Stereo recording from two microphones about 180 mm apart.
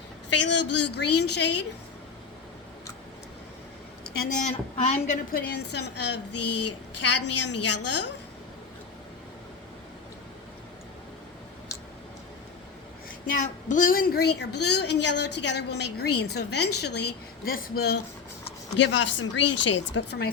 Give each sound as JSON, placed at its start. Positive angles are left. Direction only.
{"t": 0.3, "sound": "a woman's voice", "side_deg": 80}
{"t": 4.1, "sound": "a woman's voice", "side_deg": 55}
{"t": 5.5, "sound": "a woman's voice", "side_deg": 70}
{"t": 13.2, "sound": "a woman's voice", "side_deg": 45}
{"t": 18.8, "sound": "speech", "side_deg": 85}